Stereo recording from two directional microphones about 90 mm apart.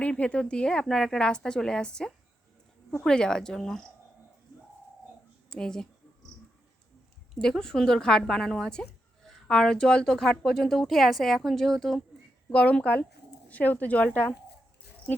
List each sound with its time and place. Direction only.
0.0 s a woman's voice: 15° left (ahead or behind)
5.5 s speech: 5° left (ahead or behind)
7.3 s a woman's voice: 5° left (ahead or behind)
12.5 s a woman's voice: 15° left (ahead or behind)